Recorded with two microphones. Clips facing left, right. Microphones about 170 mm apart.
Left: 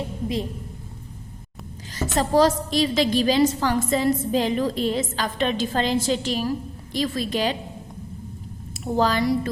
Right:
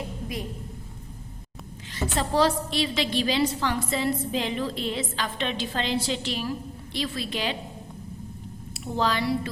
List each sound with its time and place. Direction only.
2.0 s a woman's voice: 40° left (ahead or behind)
8.8 s a woman's voice: 45° left (ahead or behind)